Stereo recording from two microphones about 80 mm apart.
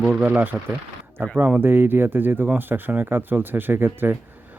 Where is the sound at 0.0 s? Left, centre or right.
Right.